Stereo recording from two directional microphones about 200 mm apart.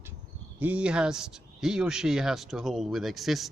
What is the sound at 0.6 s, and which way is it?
Speech, 5° right (ahead or behind).